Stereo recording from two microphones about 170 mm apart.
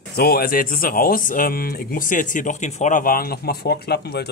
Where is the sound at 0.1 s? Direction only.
65° left (ahead or behind).